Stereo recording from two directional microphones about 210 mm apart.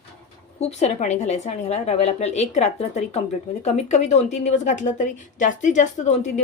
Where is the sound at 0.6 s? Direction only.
30° left (ahead or behind).